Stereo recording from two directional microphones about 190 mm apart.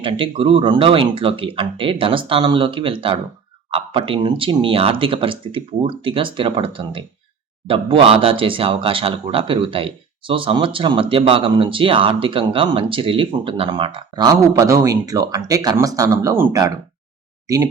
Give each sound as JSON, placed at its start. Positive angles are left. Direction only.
{"t": 0.0, "sound": "speech", "side_deg": -25}